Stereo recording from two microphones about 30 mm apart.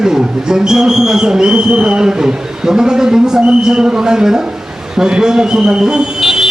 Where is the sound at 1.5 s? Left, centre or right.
Right.